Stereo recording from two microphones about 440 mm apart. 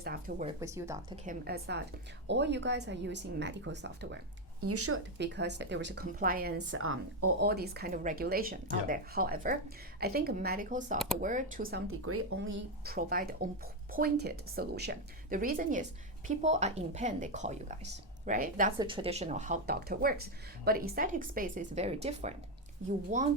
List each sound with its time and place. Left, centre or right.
0.0 s speech: centre
10.9 s speech: centre
11.2 s speech: centre